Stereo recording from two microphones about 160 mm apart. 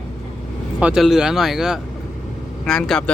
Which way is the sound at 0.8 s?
5° right (ahead or behind).